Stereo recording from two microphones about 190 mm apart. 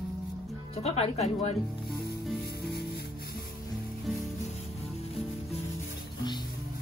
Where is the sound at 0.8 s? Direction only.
35° left (ahead or behind).